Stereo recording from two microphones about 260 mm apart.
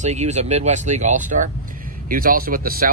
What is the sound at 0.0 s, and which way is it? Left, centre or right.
Speech, right.